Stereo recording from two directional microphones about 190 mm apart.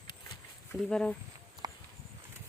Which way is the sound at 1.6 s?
20° right (ahead or behind).